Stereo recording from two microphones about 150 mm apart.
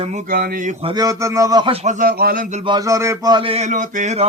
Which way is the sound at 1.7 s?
50° right (ahead or behind).